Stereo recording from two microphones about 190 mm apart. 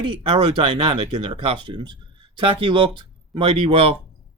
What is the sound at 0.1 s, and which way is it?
Speech, 30° right (ahead or behind).